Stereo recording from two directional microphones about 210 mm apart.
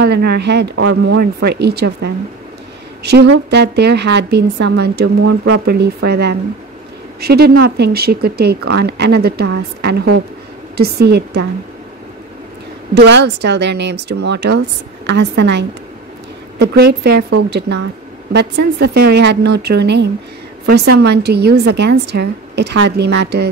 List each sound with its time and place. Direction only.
0.0 s a woman's voice: 50° right (ahead or behind)
12.9 s a woman's voice: 55° right (ahead or behind)